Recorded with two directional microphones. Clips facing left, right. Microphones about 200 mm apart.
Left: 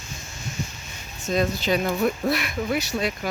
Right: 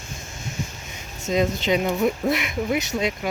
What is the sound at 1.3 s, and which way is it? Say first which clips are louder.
Speech: right 2 dB; 20° right (ahead or behind).